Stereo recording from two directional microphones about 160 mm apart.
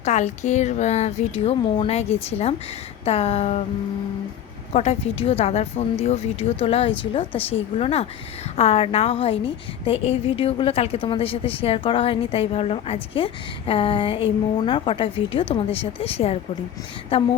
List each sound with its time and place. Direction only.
0.0 s a woman's voice: 45° left (ahead or behind)
4.7 s a woman's voice: 40° left (ahead or behind)